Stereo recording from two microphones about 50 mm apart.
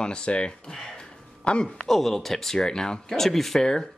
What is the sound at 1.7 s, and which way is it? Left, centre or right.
Speech, centre.